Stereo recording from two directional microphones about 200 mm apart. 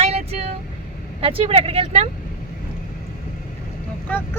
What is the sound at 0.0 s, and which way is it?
Vehicle, 30° right (ahead or behind).